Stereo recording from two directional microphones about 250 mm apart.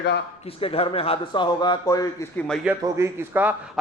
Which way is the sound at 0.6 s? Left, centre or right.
Left.